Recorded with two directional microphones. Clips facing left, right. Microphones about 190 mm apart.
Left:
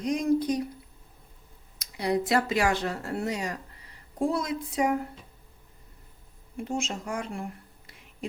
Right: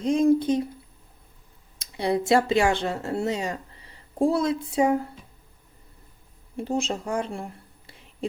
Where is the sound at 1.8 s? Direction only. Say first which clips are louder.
Right 2 dB; 25° right (ahead or behind).